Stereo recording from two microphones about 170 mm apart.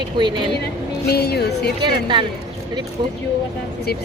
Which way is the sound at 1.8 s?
30° right (ahead or behind).